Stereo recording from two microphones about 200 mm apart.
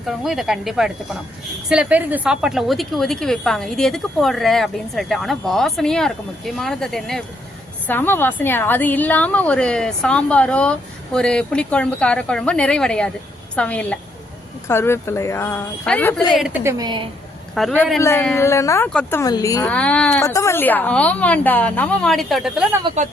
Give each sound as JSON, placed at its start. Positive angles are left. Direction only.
{"t": 0.1, "sound": "a woman's voice", "side_deg": 0}
{"t": 16.6, "sound": "a woman's voice", "side_deg": -20}
{"t": 17.5, "sound": "a woman's voice", "side_deg": 0}
{"t": 18.0, "sound": "a woman's voice", "side_deg": 10}
{"t": 19.7, "sound": "a woman's voice", "side_deg": 5}